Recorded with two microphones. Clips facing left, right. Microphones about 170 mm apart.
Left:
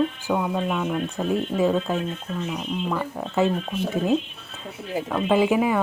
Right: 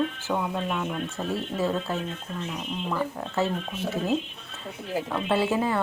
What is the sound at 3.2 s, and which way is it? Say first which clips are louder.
Speech: left 5 dB; 15° left (ahead or behind).